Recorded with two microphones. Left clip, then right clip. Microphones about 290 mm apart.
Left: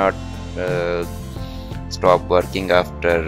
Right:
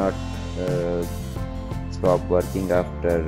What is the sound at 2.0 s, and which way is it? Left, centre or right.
Speech, left.